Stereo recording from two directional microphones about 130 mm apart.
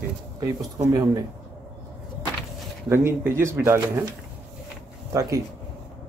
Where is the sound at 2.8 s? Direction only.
20° right (ahead or behind).